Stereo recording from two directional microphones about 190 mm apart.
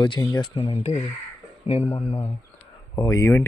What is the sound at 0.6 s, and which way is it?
Speech, 35° left (ahead or behind).